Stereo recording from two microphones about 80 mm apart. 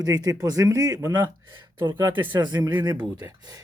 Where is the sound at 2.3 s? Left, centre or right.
Right.